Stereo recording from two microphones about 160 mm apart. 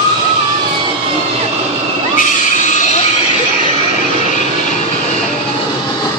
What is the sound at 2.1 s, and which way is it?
Neigh, 50° left (ahead or behind).